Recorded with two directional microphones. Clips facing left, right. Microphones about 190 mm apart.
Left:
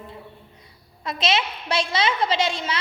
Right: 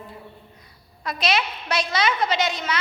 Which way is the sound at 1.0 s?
25° left (ahead or behind).